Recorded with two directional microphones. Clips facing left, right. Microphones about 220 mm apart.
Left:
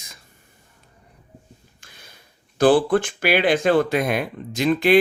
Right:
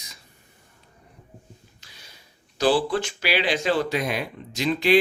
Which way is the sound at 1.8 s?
50° left (ahead or behind).